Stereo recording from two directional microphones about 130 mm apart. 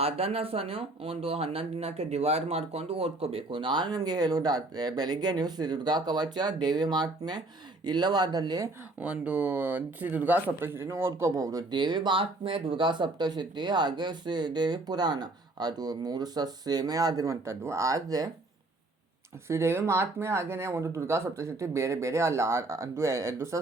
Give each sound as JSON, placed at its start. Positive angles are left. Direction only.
{"t": 0.0, "sound": "speech", "side_deg": -50}
{"t": 9.0, "sound": "speech", "side_deg": -10}
{"t": 19.5, "sound": "speech", "side_deg": -20}